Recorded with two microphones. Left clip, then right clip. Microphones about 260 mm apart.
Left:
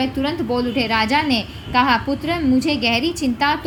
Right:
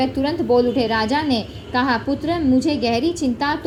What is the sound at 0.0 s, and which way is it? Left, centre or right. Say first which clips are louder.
A woman's voice: right 1 dB; centre.